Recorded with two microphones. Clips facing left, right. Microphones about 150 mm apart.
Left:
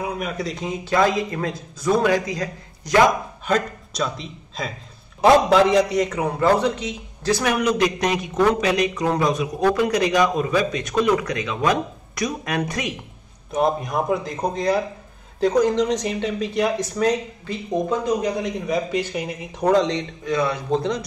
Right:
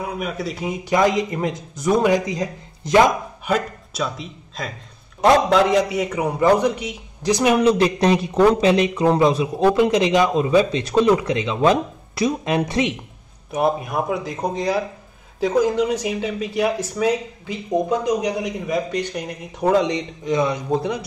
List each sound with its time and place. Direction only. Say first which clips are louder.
0.0 s a man's voice: even; 5° right (ahead or behind); by 3.0 s 20° right (ahead or behind)
3.4 s a man's voice: even; 5° right (ahead or behind)
7.5 s a man's voice: right 4 dB; 30° right (ahead or behind)
13.5 s speech: even; 5° right (ahead or behind)
18.7 s a man's voice: even; 5° left (ahead or behind)